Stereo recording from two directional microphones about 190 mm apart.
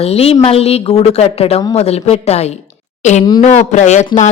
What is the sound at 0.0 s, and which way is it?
Speech, 30° left (ahead or behind).